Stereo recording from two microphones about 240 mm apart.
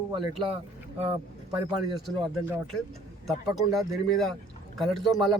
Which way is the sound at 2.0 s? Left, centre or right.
Centre.